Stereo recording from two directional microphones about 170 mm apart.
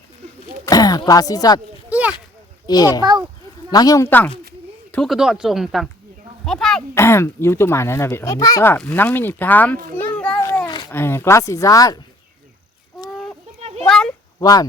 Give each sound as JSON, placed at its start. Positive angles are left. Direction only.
{"t": 0.6, "sound": "speech", "side_deg": 20}
{"t": 1.9, "sound": "a sound", "side_deg": -10}
{"t": 2.6, "sound": "speech", "side_deg": 25}
{"t": 3.0, "sound": "a child's voice", "side_deg": -25}
{"t": 3.7, "sound": "speech", "side_deg": 20}
{"t": 6.9, "sound": "speech", "side_deg": 15}
{"t": 9.9, "sound": "children playing", "side_deg": 10}
{"t": 10.7, "sound": "a sound", "side_deg": 25}
{"t": 10.9, "sound": "speech", "side_deg": 15}
{"t": 13.6, "sound": "a sound", "side_deg": -35}
{"t": 13.8, "sound": "a sound", "side_deg": 5}
{"t": 14.3, "sound": "speech", "side_deg": 20}